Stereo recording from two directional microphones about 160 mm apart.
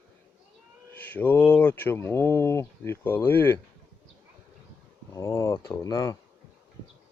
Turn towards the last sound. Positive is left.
turn(degrees=20)  # may be behind; listen again after turning